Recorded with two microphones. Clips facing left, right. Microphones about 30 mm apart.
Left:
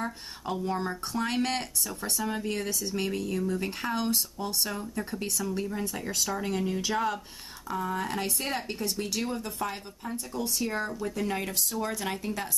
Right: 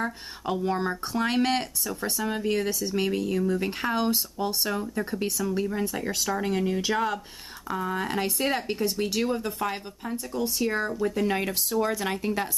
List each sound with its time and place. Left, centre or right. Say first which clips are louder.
0.0 s speech: right 4 dB; centre
12.2 s speech: right 6 dB; right